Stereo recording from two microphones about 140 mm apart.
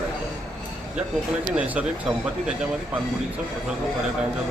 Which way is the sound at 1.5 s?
10° right (ahead or behind).